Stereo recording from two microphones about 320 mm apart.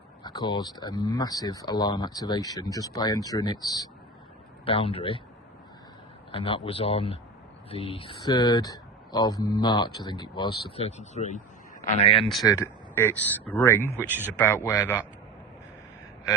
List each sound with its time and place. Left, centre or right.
0.2 s speech: centre
6.3 s speech: centre